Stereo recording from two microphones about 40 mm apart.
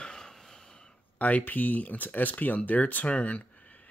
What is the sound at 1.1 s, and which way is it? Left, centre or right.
Speech, left.